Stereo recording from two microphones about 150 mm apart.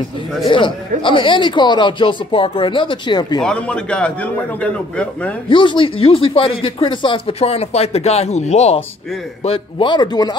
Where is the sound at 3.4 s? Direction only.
5° left (ahead or behind).